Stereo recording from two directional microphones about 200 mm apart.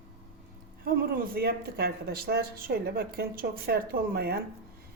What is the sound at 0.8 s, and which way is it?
Speech, 50° right (ahead or behind).